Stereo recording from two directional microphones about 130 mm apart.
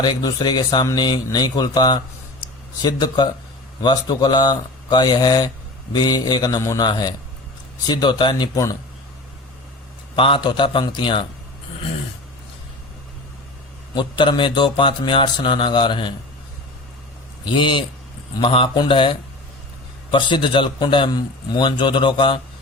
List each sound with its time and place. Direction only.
0.0 s a man's voice: 30° left (ahead or behind)
10.2 s a man's voice: 40° left (ahead or behind)
13.9 s a man's voice: 35° left (ahead or behind)
17.4 s a man's voice: 40° left (ahead or behind)